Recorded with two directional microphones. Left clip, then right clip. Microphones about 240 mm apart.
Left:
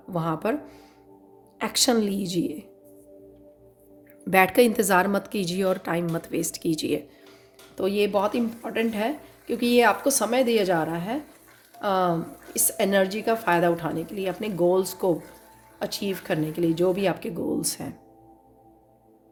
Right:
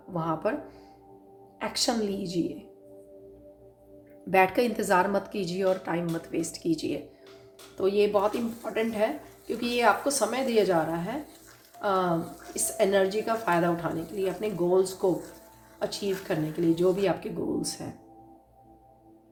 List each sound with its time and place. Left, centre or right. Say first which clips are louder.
0.1 s speech: left 2 dB; left
1.5 s speech: left 5 dB; left
4.2 s speech: left 4 dB; left